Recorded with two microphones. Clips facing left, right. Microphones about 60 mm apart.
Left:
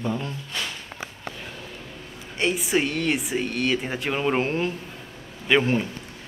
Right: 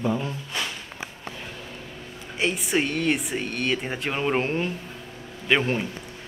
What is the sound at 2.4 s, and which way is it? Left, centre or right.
Speech, centre.